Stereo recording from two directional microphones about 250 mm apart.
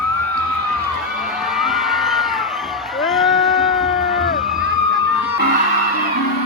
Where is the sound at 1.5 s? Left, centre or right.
Centre.